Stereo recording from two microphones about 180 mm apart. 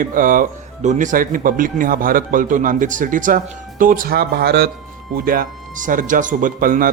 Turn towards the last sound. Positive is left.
turn(degrees=-50)  # may be behind; listen again after turning